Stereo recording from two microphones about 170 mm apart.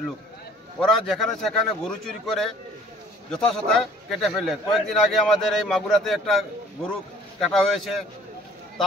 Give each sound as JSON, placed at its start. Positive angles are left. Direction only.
{"t": 0.7, "sound": "a man's voice", "side_deg": 0}